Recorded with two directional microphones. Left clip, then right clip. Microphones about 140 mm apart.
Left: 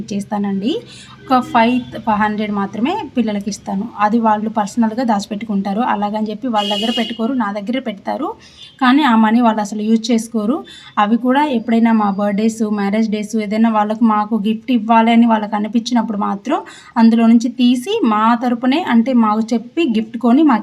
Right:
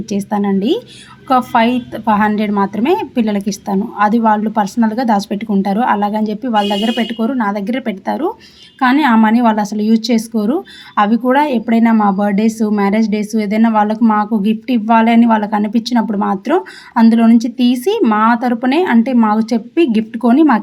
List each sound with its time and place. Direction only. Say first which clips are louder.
0.1 s a woman's voice: right 5 dB; 25° right (ahead or behind)